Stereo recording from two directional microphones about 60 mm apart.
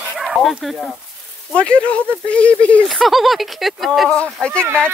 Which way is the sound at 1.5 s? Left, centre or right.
Centre.